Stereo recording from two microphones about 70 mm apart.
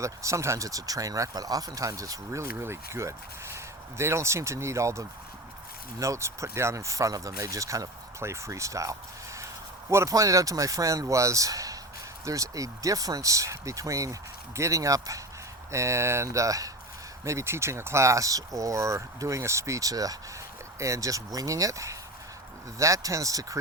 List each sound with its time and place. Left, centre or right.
0.0 s speech: right
15.7 s speech: right
17.2 s speech: right
20.7 s speech: right